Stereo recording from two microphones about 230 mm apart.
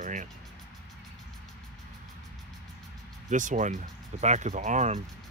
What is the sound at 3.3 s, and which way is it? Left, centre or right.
Speech, right.